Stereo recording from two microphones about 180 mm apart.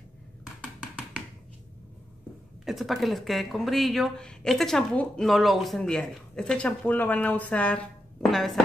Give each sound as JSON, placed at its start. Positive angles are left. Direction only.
{"t": 2.6, "sound": "speech", "side_deg": 0}